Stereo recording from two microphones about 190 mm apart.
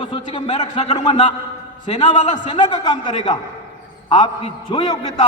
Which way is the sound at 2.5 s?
25° left (ahead or behind).